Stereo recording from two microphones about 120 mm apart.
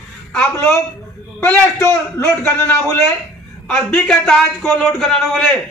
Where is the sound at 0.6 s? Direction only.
20° left (ahead or behind).